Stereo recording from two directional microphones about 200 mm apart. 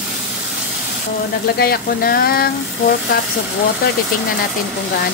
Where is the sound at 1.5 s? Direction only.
50° left (ahead or behind).